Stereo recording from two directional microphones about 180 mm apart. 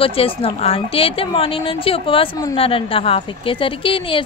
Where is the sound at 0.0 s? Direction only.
30° left (ahead or behind).